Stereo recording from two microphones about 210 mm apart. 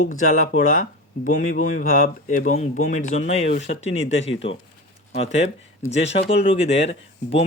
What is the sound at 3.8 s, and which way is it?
Speech, 60° left (ahead or behind).